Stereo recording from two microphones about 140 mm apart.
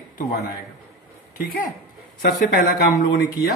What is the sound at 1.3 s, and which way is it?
Speech, 90° left.